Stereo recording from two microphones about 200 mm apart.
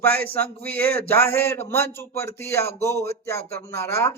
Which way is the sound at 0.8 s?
50° right (ahead or behind).